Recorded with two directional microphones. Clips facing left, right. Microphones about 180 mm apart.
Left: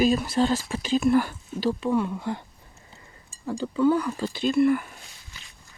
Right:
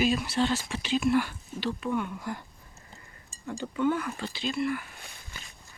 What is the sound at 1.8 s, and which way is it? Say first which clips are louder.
Speech: left 6 dB; 30° left (ahead or behind).